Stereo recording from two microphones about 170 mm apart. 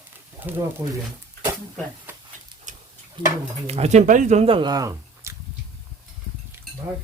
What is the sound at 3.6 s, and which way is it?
Speech, 40° right (ahead or behind).